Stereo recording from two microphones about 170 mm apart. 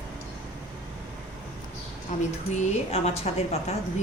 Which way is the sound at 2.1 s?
45° left (ahead or behind).